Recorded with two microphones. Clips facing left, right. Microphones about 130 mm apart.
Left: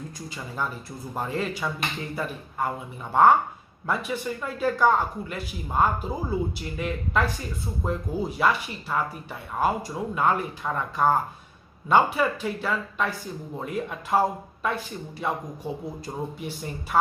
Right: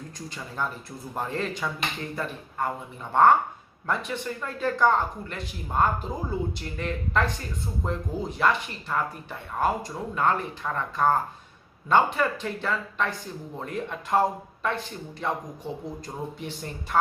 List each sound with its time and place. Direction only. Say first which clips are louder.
0.3 s a man's voice: even; 5° left (ahead or behind)